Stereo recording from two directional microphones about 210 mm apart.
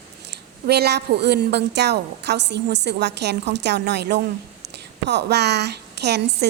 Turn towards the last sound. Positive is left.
turn(degrees=-50)  # may be behind; listen again after turning